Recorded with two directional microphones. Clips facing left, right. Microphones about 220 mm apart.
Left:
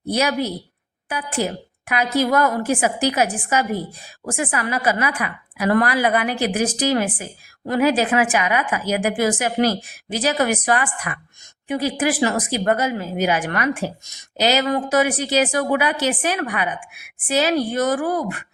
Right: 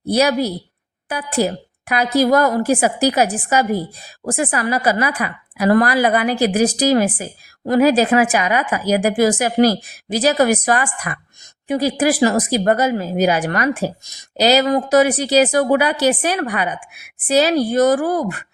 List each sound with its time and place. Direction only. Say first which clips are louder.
0.1 s speech: right 5 dB; 35° right (ahead or behind)